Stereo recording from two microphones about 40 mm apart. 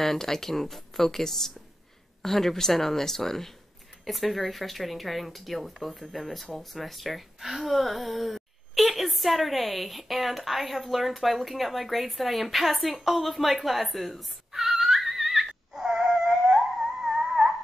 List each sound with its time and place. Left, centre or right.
0.0 s speech: centre
15.8 s dog: centre